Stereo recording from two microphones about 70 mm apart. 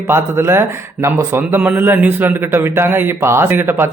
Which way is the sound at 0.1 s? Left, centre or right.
Right.